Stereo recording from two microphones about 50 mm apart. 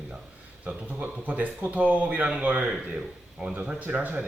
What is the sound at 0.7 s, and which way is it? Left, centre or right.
Speech, right.